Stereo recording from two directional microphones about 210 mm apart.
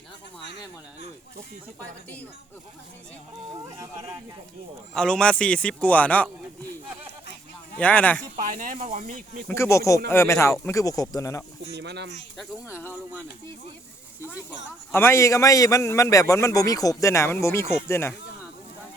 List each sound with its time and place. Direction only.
4.9 s speech: 5° left (ahead or behind)
7.8 s a man's voice: 5° left (ahead or behind)
8.4 s speech: 40° right (ahead or behind)
9.5 s a man's voice: 15° left (ahead or behind)
11.7 s speech: 55° right (ahead or behind)
12.8 s a man's voice: 10° left (ahead or behind)
14.9 s a man's voice: 10° left (ahead or behind)